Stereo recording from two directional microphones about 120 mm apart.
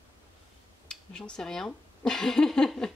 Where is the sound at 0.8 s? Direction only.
5° left (ahead or behind).